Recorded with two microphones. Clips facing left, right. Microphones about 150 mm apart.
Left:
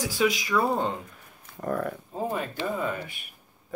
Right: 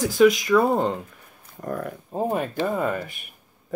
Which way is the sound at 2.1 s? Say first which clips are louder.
Right 7 dB; 50° right (ahead or behind).